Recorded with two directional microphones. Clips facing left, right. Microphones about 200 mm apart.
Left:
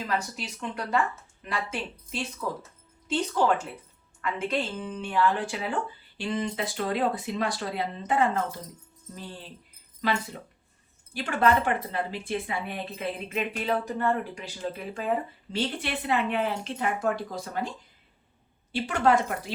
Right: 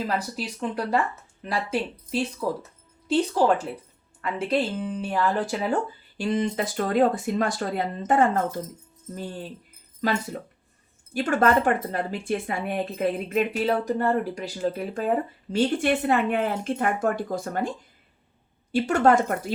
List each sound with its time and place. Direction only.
0.0 s speech: 35° right (ahead or behind)
3.3 s speech: 35° right (ahead or behind)
11.1 s speech: 45° right (ahead or behind)